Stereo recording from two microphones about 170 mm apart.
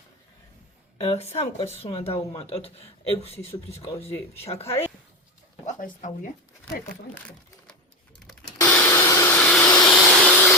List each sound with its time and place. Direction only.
0.9 s a man's voice: 40° left (ahead or behind)
3.8 s speech: 15° left (ahead or behind)
5.6 s speech: 50° left (ahead or behind)
8.5 s vacuum cleaner: 15° left (ahead or behind)